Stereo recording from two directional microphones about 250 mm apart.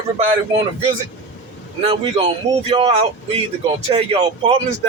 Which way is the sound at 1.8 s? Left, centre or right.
Right.